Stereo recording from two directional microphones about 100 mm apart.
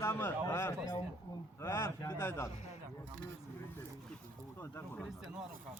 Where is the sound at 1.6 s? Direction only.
25° left (ahead or behind).